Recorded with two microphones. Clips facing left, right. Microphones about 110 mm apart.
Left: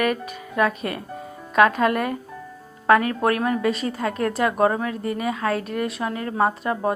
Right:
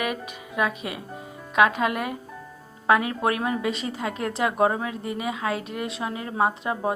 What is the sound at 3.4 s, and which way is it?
A woman's voice, 20° right (ahead or behind).